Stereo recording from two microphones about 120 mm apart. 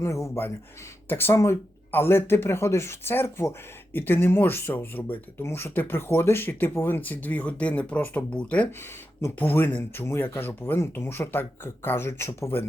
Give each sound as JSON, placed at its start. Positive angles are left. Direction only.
{"t": 0.0, "sound": "speech", "side_deg": 25}